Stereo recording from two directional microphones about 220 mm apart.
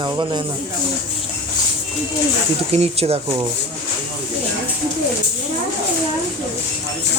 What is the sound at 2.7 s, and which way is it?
Speech, 30° right (ahead or behind).